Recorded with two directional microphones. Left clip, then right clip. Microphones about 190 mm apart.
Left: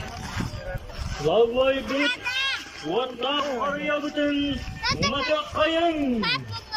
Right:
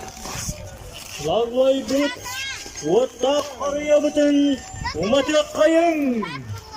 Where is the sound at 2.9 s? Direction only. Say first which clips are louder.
Right 7 dB; 35° right (ahead or behind).